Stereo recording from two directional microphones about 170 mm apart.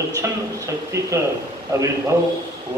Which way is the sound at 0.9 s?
20° right (ahead or behind).